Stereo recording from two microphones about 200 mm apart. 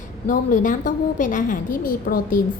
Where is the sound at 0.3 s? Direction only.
40° left (ahead or behind).